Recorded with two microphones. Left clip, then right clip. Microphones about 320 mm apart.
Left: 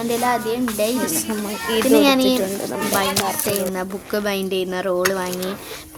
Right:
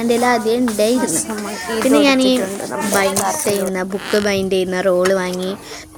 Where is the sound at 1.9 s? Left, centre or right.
Left.